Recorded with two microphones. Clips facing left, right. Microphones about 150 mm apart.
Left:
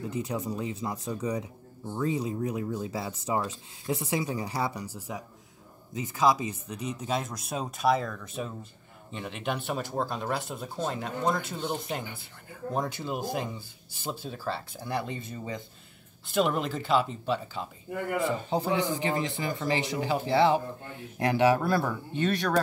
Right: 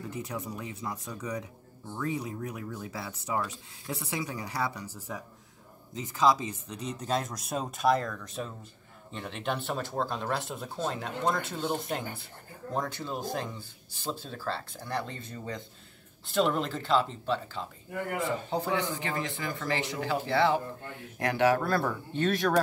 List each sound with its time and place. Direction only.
0.1 s speech: 20° left (ahead or behind); by 12.0 s centre (ahead or behind)
12.7 s speech: 15° left (ahead or behind); by 22.6 s centre (ahead or behind)